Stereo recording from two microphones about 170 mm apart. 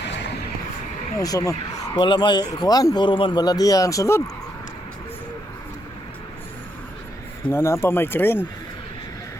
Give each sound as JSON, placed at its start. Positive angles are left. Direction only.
{"t": 1.2, "sound": "speech", "side_deg": 20}
{"t": 7.5, "sound": "speech", "side_deg": 15}